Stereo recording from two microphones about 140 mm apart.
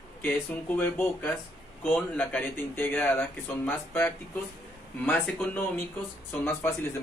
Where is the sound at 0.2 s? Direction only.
15° left (ahead or behind).